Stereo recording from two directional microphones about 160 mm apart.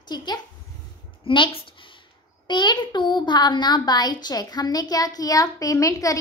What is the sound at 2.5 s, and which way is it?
A child's voice, 30° left (ahead or behind).